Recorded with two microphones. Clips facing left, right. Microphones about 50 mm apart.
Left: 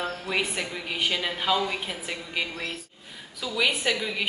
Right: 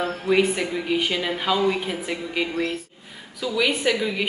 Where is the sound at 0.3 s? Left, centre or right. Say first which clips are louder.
Right 10 dB; centre.